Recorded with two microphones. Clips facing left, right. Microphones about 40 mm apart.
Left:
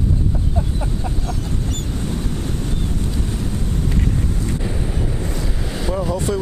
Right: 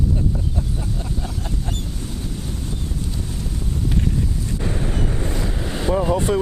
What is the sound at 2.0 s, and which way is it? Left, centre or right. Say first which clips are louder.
Ocean: left 5 dB; left.